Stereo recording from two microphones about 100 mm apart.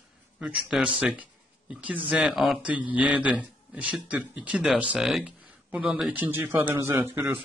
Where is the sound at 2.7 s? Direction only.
15° right (ahead or behind).